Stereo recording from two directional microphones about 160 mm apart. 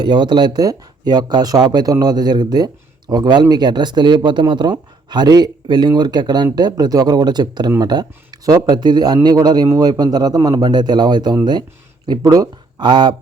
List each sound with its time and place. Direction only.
0.0 s speech: 30° right (ahead or behind)